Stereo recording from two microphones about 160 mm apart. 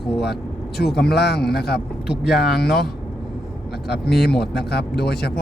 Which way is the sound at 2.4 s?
90° left.